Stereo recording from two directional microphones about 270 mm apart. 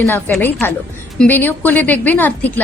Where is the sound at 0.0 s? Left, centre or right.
Centre.